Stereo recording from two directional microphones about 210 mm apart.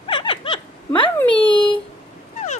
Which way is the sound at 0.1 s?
25° left (ahead or behind).